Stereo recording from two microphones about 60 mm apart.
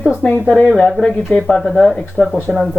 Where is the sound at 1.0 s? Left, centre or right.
Centre.